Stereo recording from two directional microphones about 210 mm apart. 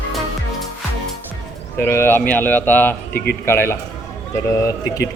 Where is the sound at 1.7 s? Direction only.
10° left (ahead or behind).